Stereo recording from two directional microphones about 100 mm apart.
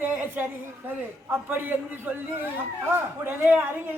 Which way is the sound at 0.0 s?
20° right (ahead or behind).